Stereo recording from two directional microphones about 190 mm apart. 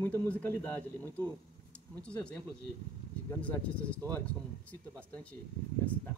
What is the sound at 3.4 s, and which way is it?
Speech, 5° left (ahead or behind).